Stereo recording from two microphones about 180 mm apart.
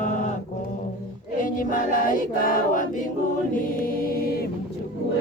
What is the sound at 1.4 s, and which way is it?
Choir, 50° left (ahead or behind).